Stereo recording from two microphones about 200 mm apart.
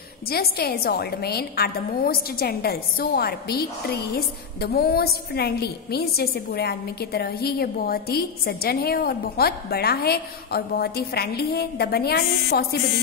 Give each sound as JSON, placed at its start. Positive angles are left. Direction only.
{"t": 0.3, "sound": "a woman's voice", "side_deg": 50}